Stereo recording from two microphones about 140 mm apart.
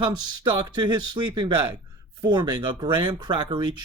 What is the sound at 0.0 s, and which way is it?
Speech, 30° right (ahead or behind).